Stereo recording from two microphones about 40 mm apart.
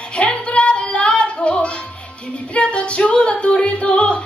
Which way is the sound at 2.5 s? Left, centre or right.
Left.